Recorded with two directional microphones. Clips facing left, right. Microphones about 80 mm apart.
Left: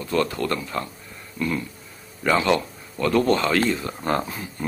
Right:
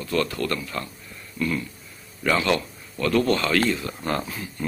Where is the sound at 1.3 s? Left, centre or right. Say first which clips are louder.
Even; centre.